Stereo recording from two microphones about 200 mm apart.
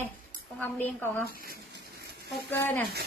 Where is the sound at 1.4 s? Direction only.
50° right (ahead or behind).